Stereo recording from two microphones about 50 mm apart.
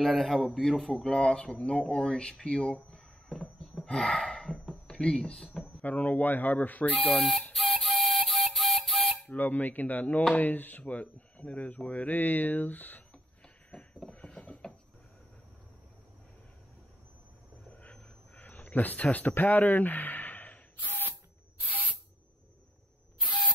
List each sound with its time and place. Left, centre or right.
0.0 s speech: centre
1.0 s speech: centre
3.3 s a sound: centre
3.8 s speech: centre
4.6 s a sound: left
5.1 s speech: centre
5.5 s speech: left
7.0 s speech: centre
7.5 s flute: centre
9.3 s speech: left
14.0 s mechanisms: left
17.6 s a sound: left